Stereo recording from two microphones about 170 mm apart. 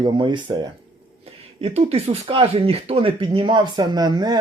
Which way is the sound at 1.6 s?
35° right (ahead or behind).